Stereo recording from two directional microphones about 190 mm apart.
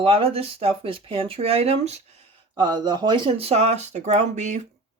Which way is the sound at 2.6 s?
20° right (ahead or behind).